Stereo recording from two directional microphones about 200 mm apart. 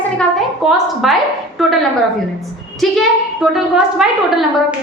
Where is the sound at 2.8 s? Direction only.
Centre (ahead or behind).